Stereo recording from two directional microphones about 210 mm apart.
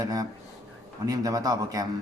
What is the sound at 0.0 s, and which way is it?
A man's voice, 15° right (ahead or behind).